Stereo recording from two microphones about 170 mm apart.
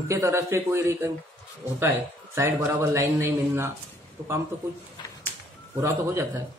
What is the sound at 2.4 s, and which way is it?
A man's voice, 15° right (ahead or behind).